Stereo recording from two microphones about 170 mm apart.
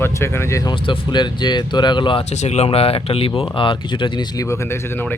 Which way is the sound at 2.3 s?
40° left (ahead or behind).